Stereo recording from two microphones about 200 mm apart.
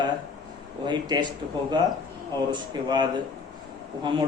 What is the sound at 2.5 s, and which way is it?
Speech, 20° right (ahead or behind).